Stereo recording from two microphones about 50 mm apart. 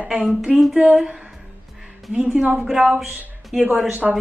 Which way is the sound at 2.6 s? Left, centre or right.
Centre.